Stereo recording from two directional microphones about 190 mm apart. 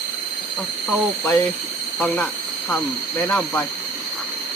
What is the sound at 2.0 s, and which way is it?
Speech, 5° left (ahead or behind).